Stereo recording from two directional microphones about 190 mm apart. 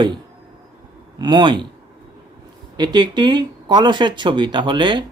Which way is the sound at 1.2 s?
25° right (ahead or behind).